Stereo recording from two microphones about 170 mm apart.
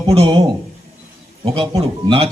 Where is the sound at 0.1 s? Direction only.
35° right (ahead or behind).